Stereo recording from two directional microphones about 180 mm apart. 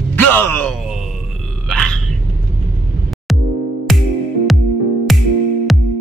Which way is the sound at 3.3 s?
Centre (ahead or behind).